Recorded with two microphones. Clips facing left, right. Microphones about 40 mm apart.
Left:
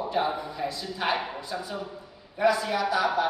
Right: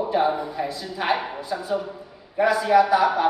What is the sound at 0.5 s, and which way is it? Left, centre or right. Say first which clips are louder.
A man's voice: right 4 dB; centre.